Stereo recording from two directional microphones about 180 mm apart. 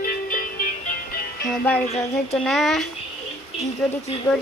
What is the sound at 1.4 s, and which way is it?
A child's voice, 5° left (ahead or behind).